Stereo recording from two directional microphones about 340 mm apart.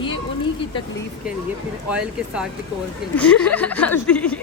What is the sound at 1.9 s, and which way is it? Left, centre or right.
Speech, centre.